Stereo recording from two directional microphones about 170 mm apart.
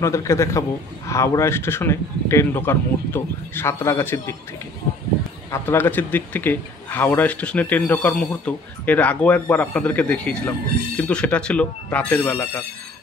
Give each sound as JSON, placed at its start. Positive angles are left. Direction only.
{"t": 0.0, "sound": "speech", "side_deg": 15}
{"t": 5.5, "sound": "speech", "side_deg": 15}